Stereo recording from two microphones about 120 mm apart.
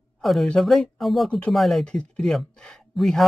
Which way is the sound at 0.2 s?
Centre (ahead or behind).